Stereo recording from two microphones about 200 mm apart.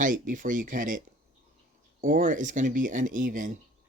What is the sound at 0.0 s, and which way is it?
Speech, 40° right (ahead or behind).